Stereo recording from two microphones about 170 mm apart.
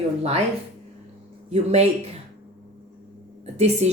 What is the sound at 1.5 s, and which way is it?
Speech, 40° right (ahead or behind).